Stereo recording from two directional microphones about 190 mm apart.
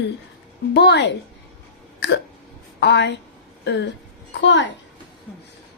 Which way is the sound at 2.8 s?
65° left (ahead or behind).